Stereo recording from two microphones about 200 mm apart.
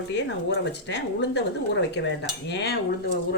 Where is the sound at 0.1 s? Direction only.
60° left (ahead or behind).